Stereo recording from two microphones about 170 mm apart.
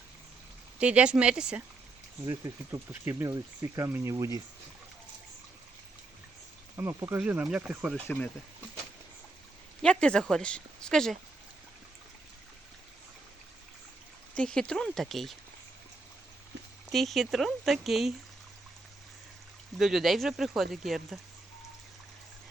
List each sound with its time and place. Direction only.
0.8 s speech: 5° right (ahead or behind)
2.2 s speech: 20° right (ahead or behind)
6.7 s speech: 15° right (ahead or behind)
7.9 s speech: 10° left (ahead or behind)
9.8 s speech: 5° left (ahead or behind)
14.3 s speech: 5° left (ahead or behind)
16.9 s speech: centre (ahead or behind)
19.8 s speech: centre (ahead or behind)